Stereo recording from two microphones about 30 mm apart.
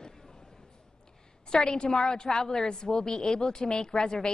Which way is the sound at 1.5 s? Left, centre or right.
Left.